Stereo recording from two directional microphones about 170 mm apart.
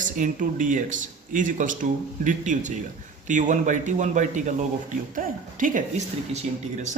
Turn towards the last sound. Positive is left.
turn(degrees=-45)  # may be behind; listen again after turning